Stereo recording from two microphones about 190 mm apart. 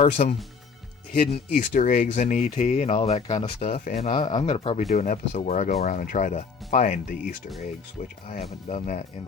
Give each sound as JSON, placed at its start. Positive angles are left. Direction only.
{"t": 0.0, "sound": "speech", "side_deg": 35}
{"t": 4.3, "sound": "speech", "side_deg": 30}